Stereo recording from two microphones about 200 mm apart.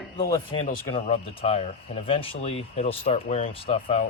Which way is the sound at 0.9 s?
30° left (ahead or behind).